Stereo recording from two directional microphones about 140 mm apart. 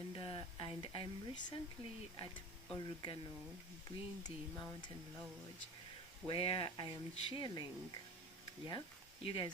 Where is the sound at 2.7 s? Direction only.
35° left (ahead or behind).